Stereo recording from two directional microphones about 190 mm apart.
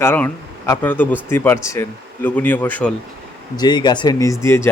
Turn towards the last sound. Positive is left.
turn(degrees=15)  # may be behind; listen again after turning